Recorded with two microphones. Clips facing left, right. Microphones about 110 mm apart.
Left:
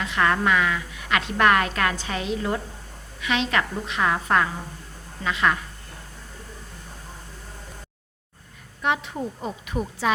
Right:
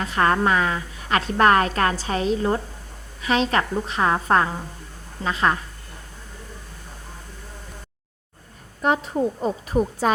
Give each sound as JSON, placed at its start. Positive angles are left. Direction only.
{"t": 0.0, "sound": "a woman's voice", "side_deg": -40}
{"t": 8.8, "sound": "a woman's voice", "side_deg": -40}